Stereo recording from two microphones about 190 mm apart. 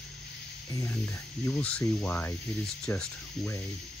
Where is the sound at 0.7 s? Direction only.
15° left (ahead or behind).